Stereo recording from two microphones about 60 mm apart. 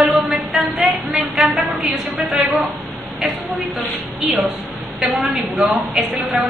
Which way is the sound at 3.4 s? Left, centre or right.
Right.